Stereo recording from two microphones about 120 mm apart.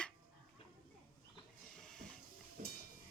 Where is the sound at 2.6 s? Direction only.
90° right.